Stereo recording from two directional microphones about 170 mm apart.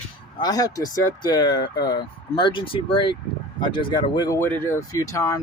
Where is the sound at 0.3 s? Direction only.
25° left (ahead or behind).